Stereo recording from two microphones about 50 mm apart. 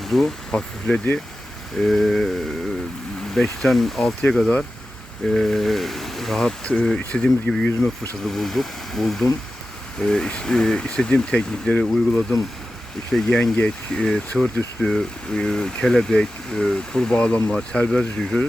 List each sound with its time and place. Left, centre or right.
0.0 s speech: centre
3.3 s speech: centre
4.3 s speech: centre
7.1 s speech: left
10.8 s speech: left
11.8 s speech: centre
13.1 s speech: centre